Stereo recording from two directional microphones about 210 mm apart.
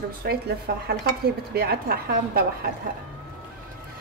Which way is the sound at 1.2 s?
45° right (ahead or behind).